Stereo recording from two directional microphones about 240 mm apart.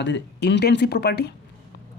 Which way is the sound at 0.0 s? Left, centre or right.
Left.